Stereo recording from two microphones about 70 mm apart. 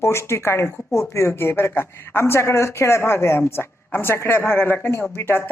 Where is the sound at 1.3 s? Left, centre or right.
Left.